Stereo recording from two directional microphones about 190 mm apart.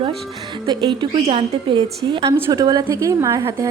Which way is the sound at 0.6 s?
25° right (ahead or behind).